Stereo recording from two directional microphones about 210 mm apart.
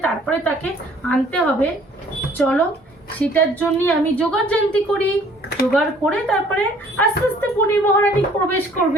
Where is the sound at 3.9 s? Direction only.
5° left (ahead or behind).